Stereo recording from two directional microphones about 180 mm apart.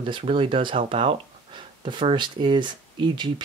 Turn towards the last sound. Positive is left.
turn(degrees=-25)  # may be behind; listen again after turning